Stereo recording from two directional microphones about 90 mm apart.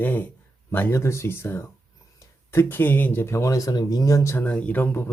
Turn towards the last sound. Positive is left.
turn(degrees=20)  # may be behind; listen again after turning